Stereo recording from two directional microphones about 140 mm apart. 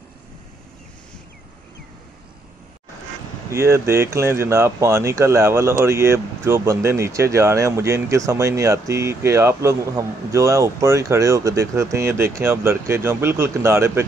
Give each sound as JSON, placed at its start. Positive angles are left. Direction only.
{"t": 3.5, "sound": "speech", "side_deg": -20}